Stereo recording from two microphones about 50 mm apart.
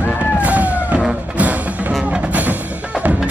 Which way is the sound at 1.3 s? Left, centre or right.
Right.